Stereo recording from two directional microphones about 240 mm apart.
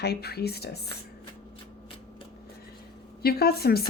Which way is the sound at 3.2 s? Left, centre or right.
Left.